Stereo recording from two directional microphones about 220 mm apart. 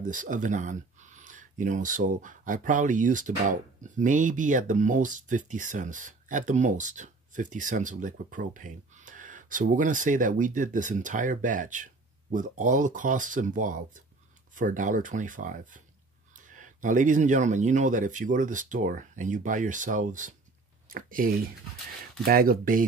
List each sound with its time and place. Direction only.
0.0 s speech: 35° right (ahead or behind)